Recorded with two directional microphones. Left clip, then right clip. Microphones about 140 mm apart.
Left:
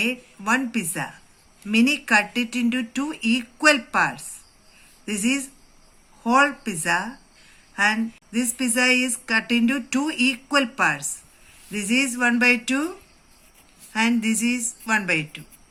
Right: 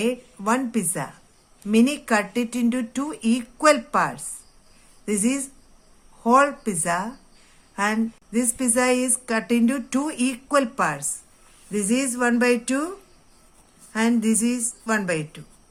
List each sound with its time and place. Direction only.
0.0 s a woman's voice: 80° right
13.9 s speech: 75° right (ahead or behind)